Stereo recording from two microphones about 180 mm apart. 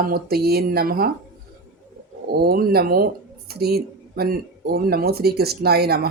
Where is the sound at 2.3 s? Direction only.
60° right (ahead or behind).